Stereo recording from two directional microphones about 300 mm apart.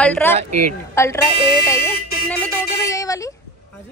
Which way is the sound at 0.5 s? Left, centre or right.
Right.